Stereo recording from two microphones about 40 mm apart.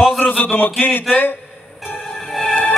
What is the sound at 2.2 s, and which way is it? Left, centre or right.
Music, centre.